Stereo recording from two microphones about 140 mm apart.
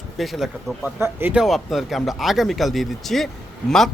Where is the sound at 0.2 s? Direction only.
Centre (ahead or behind).